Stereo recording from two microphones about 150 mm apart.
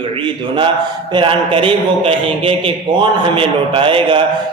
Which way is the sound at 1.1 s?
35° right (ahead or behind).